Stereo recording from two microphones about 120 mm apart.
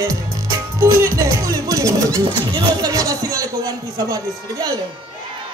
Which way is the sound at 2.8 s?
30° right (ahead or behind).